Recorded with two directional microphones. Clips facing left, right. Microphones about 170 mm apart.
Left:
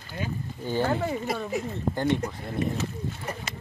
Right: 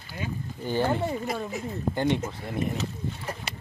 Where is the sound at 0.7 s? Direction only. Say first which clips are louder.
Even; 5° right (ahead or behind).